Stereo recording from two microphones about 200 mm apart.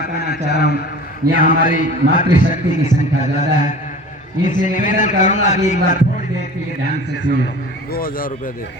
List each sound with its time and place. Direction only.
0.0 s a man's voice: 50° left (ahead or behind)
1.4 s a man's voice: 40° left (ahead or behind)
7.9 s speech: 45° left (ahead or behind)